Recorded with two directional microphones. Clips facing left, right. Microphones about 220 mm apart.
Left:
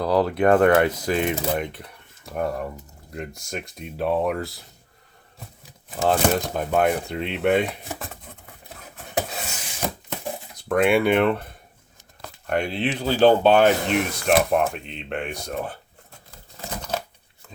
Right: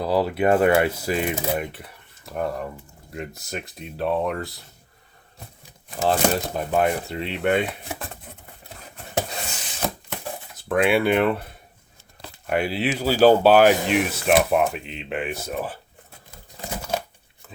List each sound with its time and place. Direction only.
0.0 s speech: 5° right (ahead or behind)
6.0 s speech: centre (ahead or behind)
8.7 s a sound: centre (ahead or behind)
10.5 s speech: 5° right (ahead or behind)
12.5 s speech: 5° right (ahead or behind)
16.6 s a sound: 10° right (ahead or behind)